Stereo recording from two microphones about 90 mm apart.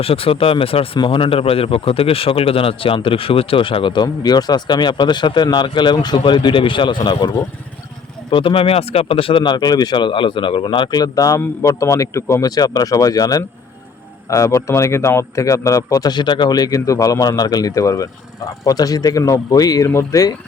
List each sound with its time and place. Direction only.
0.0 s speech: 90° left
0.9 s a man's voice: 75° left (ahead or behind)
8.3 s speech: 70° left (ahead or behind); by 12.4 s 35° left (ahead or behind)
12.4 s a man's voice: 45° left (ahead or behind)
19.9 s speech: 30° left (ahead or behind)